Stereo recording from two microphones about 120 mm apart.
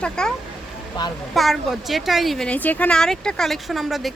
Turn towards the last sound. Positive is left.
turn(degrees=0)  # may be behind; listen again after turning